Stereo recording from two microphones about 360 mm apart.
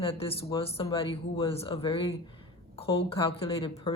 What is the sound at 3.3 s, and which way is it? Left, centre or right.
Speech, centre.